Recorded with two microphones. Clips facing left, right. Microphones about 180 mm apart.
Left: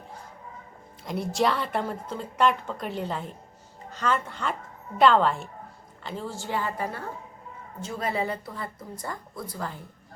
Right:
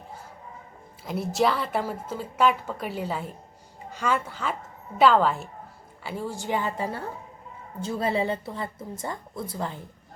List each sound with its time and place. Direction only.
1.0 s a woman's voice: centre (ahead or behind); by 9.7 s 25° right (ahead or behind)